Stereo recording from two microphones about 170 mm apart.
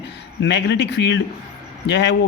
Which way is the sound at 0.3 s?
90° left.